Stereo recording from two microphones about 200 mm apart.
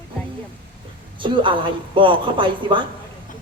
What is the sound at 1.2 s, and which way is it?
Speech, 25° right (ahead or behind).